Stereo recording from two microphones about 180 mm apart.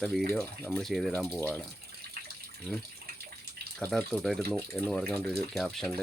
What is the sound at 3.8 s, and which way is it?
Speech, 5° left (ahead or behind).